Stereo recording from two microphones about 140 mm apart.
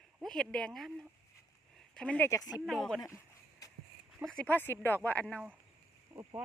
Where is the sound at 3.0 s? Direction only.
25° left (ahead or behind).